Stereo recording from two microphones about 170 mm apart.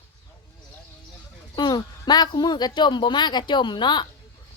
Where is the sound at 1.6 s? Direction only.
25° left (ahead or behind).